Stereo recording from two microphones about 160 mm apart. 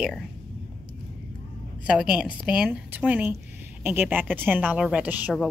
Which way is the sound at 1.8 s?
5° right (ahead or behind).